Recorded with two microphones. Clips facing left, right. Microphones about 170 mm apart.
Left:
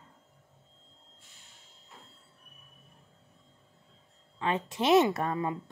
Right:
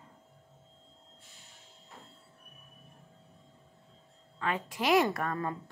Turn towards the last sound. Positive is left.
turn(degrees=15)  # may be behind; listen again after turning